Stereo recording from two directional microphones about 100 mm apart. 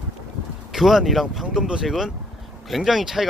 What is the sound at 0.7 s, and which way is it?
Speech, 5° right (ahead or behind).